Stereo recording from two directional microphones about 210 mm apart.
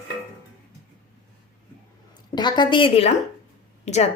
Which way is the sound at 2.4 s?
20° left (ahead or behind).